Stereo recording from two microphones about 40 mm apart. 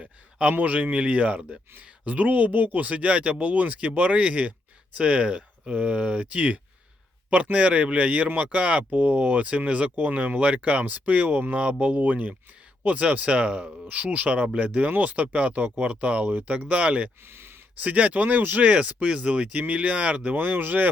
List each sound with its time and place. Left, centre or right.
0.0 s a sound: right
0.5 s speech: right
9.9 s speech: right
13.8 s speech: right
18.6 s speech: right
19.5 s speech: right
20.3 s speech: right